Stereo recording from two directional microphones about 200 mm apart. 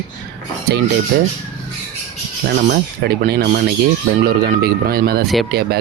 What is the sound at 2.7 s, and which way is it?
Speech, 50° right (ahead or behind).